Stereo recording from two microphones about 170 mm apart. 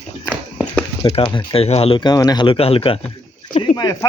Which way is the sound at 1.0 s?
35° left (ahead or behind).